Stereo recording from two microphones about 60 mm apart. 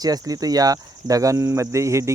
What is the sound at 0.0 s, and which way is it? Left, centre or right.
Speech, right.